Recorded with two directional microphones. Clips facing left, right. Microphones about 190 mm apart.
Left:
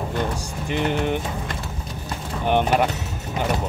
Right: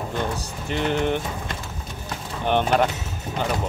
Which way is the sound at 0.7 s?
10° left (ahead or behind).